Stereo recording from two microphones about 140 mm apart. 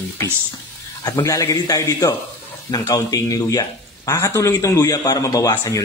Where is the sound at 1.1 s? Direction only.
25° left (ahead or behind).